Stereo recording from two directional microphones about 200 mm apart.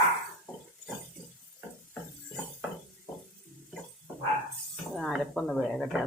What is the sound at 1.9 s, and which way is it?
Shatter, centre (ahead or behind).